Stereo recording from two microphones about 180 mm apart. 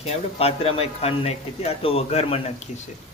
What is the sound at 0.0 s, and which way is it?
A man's voice, 35° left (ahead or behind).